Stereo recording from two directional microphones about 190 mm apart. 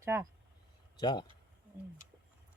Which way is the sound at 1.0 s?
20° left (ahead or behind).